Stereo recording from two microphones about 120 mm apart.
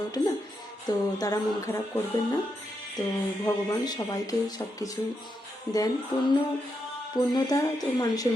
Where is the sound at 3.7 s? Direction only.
30° left (ahead or behind).